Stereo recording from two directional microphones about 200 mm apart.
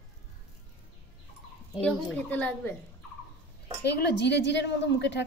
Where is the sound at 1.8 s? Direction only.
5° left (ahead or behind).